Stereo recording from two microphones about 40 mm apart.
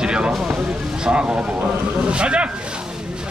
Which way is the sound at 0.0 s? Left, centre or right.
Right.